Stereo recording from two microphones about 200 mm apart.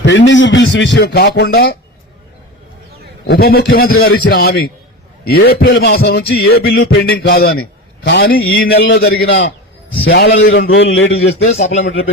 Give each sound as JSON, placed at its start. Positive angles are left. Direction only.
{"t": 0.0, "sound": "a man's voice", "side_deg": 65}
{"t": 3.2, "sound": "a sound", "side_deg": 50}
{"t": 8.9, "sound": "a man's voice", "side_deg": 60}
{"t": 10.0, "sound": "a man's voice", "side_deg": 70}
{"t": 11.0, "sound": "speech", "side_deg": 75}